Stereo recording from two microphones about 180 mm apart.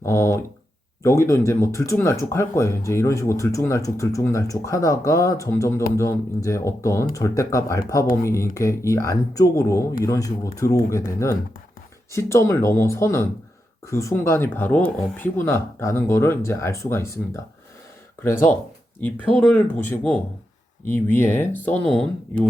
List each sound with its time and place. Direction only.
0.0 s a sound: 15° left (ahead or behind)
1.0 s speech: 15° left (ahead or behind)
18.9 s speech: 10° left (ahead or behind)